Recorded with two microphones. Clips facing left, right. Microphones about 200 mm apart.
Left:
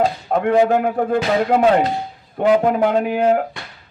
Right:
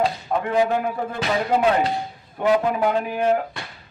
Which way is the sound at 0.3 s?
60° left (ahead or behind).